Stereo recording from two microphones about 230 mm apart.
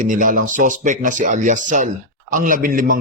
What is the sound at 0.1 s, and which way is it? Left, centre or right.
A man's voice, right.